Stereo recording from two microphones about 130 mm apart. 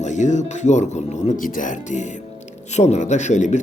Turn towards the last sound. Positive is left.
turn(degrees=65)  # may be behind; listen again after turning